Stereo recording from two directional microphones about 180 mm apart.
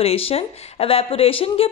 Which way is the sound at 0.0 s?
35° left (ahead or behind).